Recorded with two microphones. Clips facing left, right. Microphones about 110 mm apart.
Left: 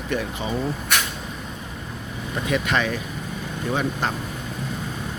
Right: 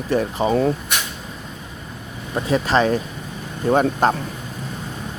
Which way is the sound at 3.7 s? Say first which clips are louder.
Right 9 dB; 45° right (ahead or behind).